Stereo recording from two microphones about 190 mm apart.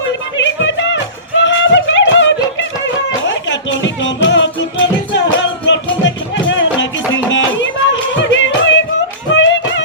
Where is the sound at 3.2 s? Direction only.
70° left (ahead or behind).